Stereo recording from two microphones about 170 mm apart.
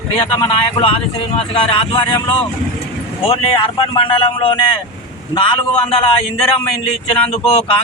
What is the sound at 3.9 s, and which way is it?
Speech, 30° left (ahead or behind).